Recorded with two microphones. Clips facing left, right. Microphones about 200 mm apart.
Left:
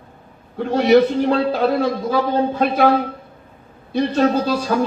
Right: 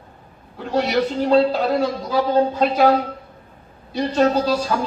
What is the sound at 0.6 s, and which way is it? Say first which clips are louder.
A man's voice: left 6 dB; 50° left (ahead or behind).